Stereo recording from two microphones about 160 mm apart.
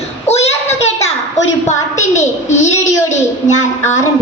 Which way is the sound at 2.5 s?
45° left (ahead or behind).